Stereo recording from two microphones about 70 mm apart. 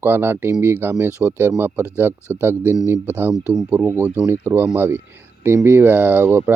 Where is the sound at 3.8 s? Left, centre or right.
Right.